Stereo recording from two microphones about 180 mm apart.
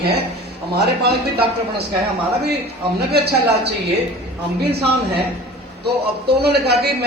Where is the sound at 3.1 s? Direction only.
65° right (ahead or behind).